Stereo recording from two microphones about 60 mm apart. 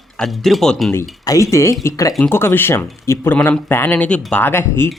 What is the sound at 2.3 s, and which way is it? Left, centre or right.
Speech, left.